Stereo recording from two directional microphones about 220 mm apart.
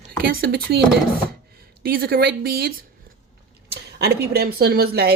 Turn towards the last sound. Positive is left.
turn(degrees=-45)  # may be behind; listen again after turning